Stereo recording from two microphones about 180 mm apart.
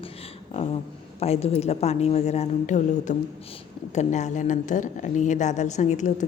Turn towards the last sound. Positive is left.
turn(degrees=40)  # may be behind; listen again after turning